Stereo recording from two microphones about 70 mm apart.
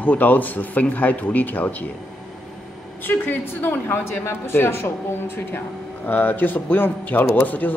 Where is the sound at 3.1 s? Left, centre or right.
Left.